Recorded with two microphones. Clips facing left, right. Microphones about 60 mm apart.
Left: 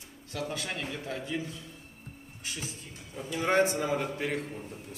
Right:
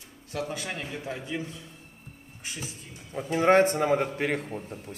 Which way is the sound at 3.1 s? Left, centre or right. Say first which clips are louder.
Right 7 dB; right.